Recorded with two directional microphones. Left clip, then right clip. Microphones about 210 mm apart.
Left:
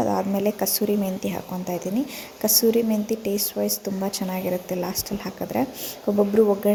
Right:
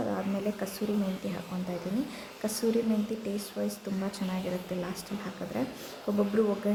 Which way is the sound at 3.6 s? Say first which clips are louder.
Left 7 dB; 20° left (ahead or behind).